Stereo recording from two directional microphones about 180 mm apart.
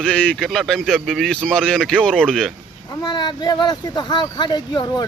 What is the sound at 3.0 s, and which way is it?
Speech, 25° left (ahead or behind).